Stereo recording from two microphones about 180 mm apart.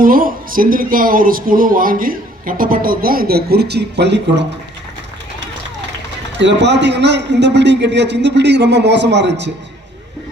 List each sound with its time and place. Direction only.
0.0 s a woman's voice: 50° right (ahead or behind); by 4.4 s 70° right (ahead or behind)
6.4 s a man's voice: 75° right (ahead or behind)